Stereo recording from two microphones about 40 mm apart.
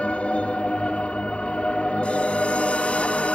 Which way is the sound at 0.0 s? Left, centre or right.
Left.